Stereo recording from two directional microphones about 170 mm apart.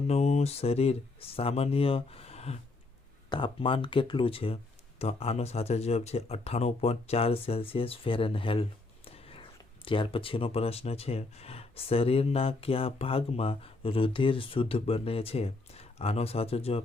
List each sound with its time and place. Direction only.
0.1 s speech: 40° left (ahead or behind)